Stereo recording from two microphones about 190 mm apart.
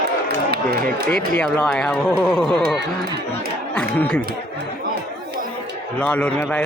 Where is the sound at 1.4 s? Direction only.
5° left (ahead or behind).